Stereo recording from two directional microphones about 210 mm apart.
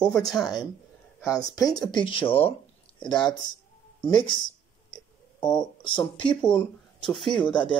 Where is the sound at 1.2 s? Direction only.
15° left (ahead or behind).